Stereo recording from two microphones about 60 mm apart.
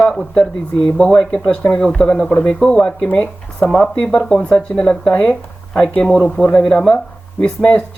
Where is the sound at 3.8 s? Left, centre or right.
Left.